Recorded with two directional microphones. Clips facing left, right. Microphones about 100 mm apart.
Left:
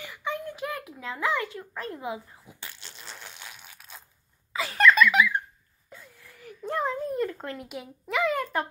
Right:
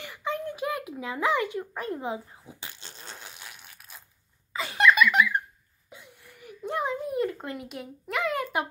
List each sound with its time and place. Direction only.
0.1 s a sound: 25° right (ahead or behind)
0.6 s a child's voice: 20° right (ahead or behind)
2.6 s fart: 25° right (ahead or behind)
3.2 s crushing: 10° right (ahead or behind)
4.7 s giggle: 10° right (ahead or behind)
5.9 s whimper: 15° right (ahead or behind)
6.9 s a child's voice: 5° right (ahead or behind)